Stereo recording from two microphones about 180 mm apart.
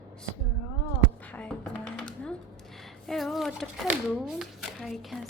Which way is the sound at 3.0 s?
Centre (ahead or behind).